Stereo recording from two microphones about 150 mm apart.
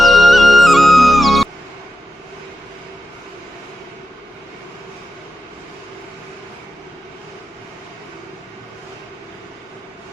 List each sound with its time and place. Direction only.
0.0 s music: centre (ahead or behind)